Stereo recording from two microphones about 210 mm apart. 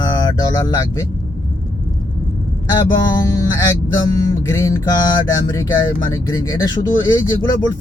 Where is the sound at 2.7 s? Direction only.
15° left (ahead or behind).